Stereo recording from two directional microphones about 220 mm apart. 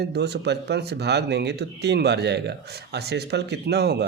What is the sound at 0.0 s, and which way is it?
Speech, 50° right (ahead or behind).